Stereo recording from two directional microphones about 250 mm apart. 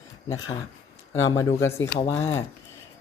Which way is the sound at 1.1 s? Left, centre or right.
Left.